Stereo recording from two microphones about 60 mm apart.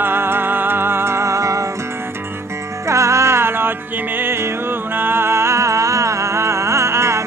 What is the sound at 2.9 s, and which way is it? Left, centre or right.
Music, right.